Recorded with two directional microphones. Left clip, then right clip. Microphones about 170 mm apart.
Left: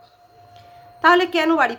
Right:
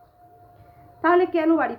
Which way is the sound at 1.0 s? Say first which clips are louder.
Left 4 dB; 15° left (ahead or behind).